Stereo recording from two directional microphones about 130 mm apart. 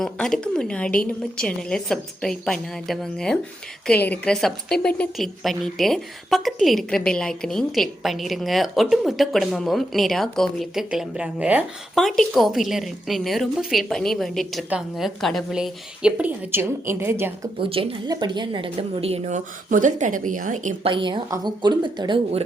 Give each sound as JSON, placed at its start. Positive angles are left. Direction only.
{"t": 0.0, "sound": "a woman's voice", "side_deg": 5}
{"t": 11.9, "sound": "a woman's voice", "side_deg": 0}
{"t": 17.6, "sound": "speech", "side_deg": -45}
{"t": 18.1, "sound": "a woman's voice", "side_deg": -35}
{"t": 20.8, "sound": "speech", "side_deg": -40}